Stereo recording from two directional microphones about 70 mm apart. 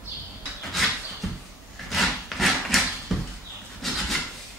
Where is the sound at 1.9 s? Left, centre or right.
Centre.